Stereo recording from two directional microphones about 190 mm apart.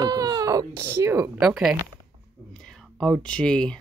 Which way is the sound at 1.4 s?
Centre (ahead or behind).